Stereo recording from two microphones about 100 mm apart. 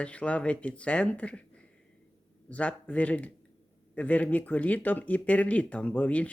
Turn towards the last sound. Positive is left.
turn(degrees=15)  # may be behind; listen again after turning